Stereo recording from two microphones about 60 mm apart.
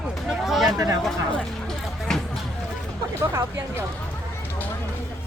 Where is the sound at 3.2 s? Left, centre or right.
Right.